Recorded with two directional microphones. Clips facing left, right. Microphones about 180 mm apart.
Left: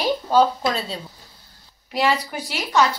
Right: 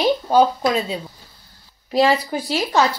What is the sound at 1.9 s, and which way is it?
Speech, 30° right (ahead or behind).